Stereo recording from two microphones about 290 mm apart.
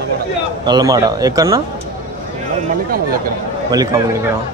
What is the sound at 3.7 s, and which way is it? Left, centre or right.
Speech, centre.